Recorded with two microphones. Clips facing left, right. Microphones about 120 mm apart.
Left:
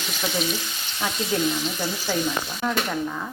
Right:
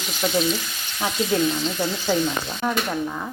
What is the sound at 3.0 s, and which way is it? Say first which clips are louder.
Frying: right 1 dB; 15° right (ahead or behind).